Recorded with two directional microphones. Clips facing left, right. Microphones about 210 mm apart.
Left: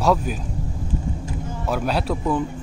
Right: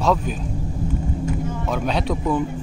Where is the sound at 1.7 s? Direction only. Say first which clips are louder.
Left 1 dB; 5° left (ahead or behind).